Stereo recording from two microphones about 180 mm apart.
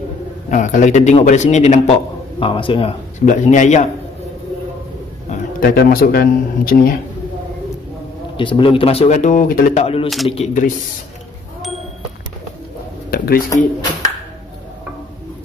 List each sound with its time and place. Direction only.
0.5 s a man's voice: 45° left (ahead or behind)
2.4 s speech: 30° left (ahead or behind)
3.3 s a man's voice: 45° left (ahead or behind)
5.3 s a man's voice: 55° left (ahead or behind)
8.4 s a man's voice: 30° left (ahead or behind); by 9.8 s 50° left (ahead or behind)
10.0 s a man's voice: centre (ahead or behind)
10.3 s a man's voice: 40° left (ahead or behind)
13.1 s a sound: 55° left (ahead or behind)